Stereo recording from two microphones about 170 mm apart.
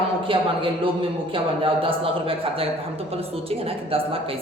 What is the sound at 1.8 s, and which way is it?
A woman's voice, 30° right (ahead or behind).